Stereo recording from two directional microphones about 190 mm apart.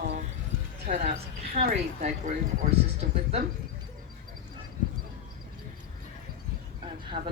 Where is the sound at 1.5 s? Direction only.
40° right (ahead or behind).